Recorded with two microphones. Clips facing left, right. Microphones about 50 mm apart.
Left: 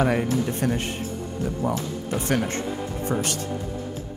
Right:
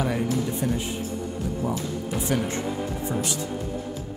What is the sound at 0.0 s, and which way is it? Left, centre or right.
Speech, left.